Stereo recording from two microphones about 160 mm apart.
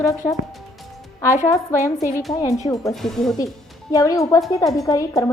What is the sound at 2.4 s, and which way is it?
Speech, 25° left (ahead or behind).